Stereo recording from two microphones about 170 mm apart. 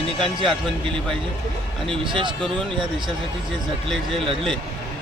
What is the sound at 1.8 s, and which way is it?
Speech, 30° right (ahead or behind).